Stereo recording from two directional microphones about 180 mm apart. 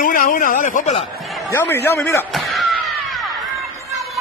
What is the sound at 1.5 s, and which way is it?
Speech, 15° left (ahead or behind).